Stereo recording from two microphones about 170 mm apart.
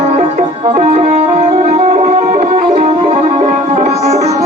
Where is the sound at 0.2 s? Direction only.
40° right (ahead or behind).